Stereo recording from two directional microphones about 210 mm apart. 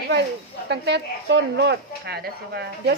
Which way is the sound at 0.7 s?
55° right (ahead or behind).